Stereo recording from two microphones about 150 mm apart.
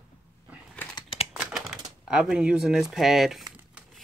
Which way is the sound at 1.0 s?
35° left (ahead or behind).